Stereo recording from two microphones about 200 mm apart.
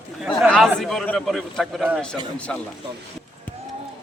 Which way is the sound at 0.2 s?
Centre (ahead or behind).